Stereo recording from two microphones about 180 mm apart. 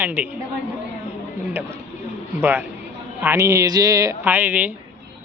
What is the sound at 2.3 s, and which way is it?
Speech, 10° right (ahead or behind).